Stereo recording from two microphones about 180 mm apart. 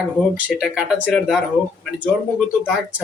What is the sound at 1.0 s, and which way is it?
Speech, 10° left (ahead or behind).